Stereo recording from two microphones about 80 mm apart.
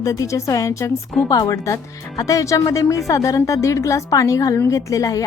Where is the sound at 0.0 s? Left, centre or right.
Left.